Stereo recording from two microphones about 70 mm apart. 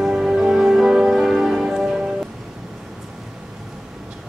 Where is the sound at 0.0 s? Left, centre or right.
Centre.